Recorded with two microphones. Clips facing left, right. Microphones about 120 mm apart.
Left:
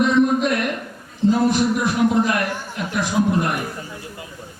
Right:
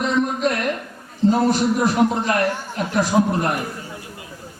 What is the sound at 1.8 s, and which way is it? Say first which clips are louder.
A man's voice: even; 35° right (ahead or behind).